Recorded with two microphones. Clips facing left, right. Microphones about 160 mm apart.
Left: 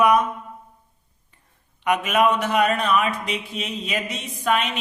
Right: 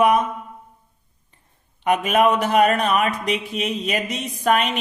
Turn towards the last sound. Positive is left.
turn(degrees=-40)  # may be behind; listen again after turning